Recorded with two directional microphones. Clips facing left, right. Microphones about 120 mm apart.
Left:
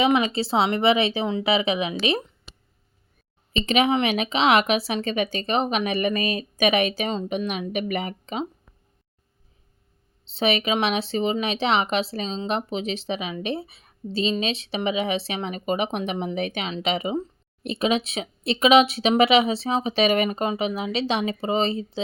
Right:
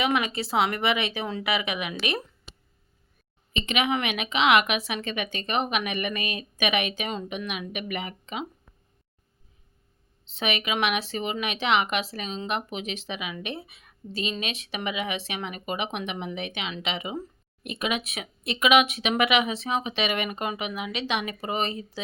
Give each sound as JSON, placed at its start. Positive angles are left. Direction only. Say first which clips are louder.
{"t": 0.0, "sound": "speech", "louder": "left 5 dB", "side_deg": 25}
{"t": 3.5, "sound": "a woman's voice", "louder": "left 5 dB", "side_deg": 35}
{"t": 10.2, "sound": "a woman's voice", "louder": "left 6 dB", "side_deg": 30}